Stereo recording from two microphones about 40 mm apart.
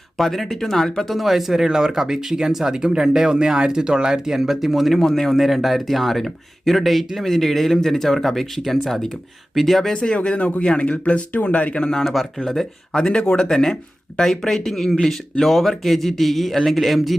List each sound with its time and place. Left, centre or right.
0.2 s speech: centre
1.1 s speech: centre
4.9 s speech: centre
5.4 s speech: centre
9.9 s speech: left
10.2 s speech: left
11.8 s speech: centre